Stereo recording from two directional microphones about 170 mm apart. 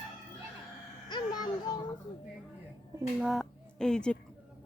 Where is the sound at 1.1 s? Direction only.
25° left (ahead or behind).